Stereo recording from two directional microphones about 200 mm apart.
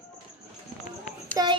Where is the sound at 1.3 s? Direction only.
25° right (ahead or behind).